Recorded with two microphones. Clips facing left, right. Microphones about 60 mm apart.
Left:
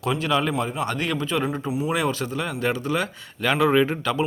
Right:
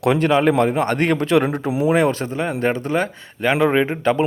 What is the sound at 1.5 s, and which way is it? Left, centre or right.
Speech, right.